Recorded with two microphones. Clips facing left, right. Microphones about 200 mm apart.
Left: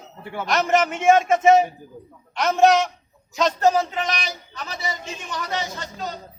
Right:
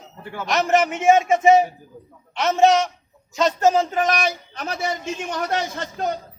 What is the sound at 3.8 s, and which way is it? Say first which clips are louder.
A man's voice: right 6 dB; 40° right (ahead or behind).